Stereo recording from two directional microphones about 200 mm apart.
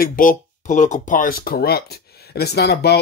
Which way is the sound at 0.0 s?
45° left (ahead or behind).